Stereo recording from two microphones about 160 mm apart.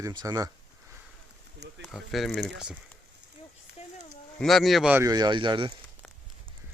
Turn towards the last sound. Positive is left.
turn(degrees=-30)  # may be behind; listen again after turning